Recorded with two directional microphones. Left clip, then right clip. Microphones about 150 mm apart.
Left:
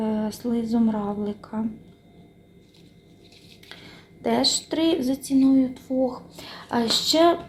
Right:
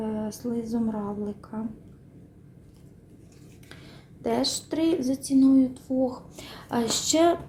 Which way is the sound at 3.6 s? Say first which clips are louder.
Left 5 dB; 20° right (ahead or behind).